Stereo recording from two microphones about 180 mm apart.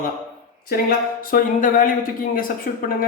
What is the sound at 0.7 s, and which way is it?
A man's voice, 50° left (ahead or behind).